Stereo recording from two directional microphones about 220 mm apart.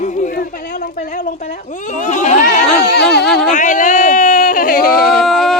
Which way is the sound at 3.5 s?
35° left (ahead or behind).